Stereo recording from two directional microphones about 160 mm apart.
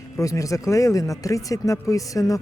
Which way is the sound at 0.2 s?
20° left (ahead or behind).